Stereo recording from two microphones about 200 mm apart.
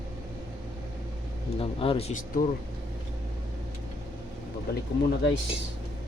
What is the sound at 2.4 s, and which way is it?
Speech, 45° left (ahead or behind).